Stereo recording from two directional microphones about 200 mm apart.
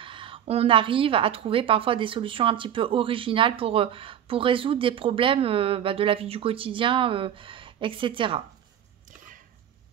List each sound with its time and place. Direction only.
0.0 s a woman's voice: 25° right (ahead or behind)